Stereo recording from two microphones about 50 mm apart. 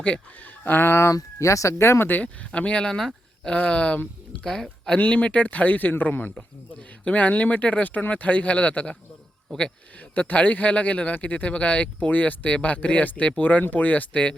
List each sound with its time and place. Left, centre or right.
0.6 s speech: left
0.9 s speech: left
2.0 s speech: left; by 4.6 s centre
4.9 s speech: left
10.2 s speech: left